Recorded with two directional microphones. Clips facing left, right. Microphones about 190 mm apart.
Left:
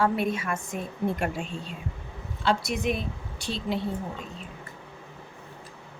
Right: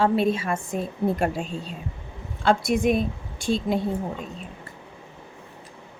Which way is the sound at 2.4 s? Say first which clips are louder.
Right 6 dB; 50° right (ahead or behind).